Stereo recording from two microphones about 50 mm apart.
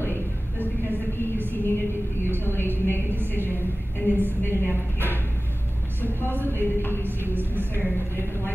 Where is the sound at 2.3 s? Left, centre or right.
Left.